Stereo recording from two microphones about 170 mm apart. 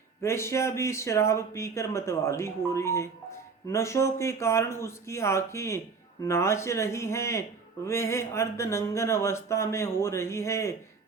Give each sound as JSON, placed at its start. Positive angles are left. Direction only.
{"t": 0.2, "sound": "speech", "side_deg": 15}